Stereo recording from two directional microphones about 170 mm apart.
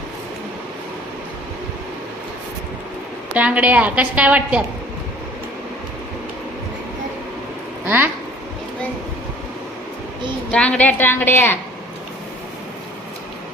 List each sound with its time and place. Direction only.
3.3 s a woman's voice: 10° right (ahead or behind)
7.9 s a woman's voice: 10° right (ahead or behind)
10.5 s a woman's voice: 5° left (ahead or behind)